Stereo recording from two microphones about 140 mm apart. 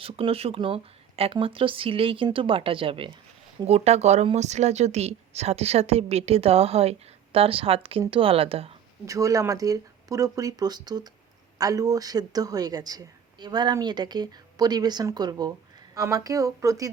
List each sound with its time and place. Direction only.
0.0 s speech: 45° right (ahead or behind)
3.7 s a woman's voice: 50° right (ahead or behind)
9.0 s speech: 25° right (ahead or behind)